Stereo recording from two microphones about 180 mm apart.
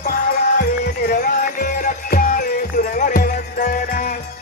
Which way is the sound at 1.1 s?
55° left (ahead or behind).